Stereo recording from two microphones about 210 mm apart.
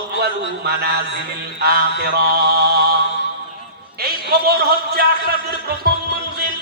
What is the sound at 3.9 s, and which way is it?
A man's voice, 50° right (ahead or behind).